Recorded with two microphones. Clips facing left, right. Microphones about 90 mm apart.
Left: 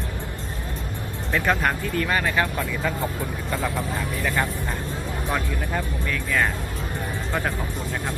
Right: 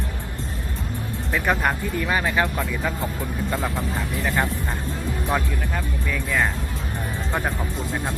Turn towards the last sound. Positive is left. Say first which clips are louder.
# right 1 dB
turn(degrees=-15)  # may be behind; listen again after turning